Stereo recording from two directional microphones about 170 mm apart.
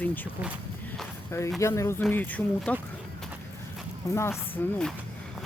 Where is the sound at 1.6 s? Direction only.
15° left (ahead or behind).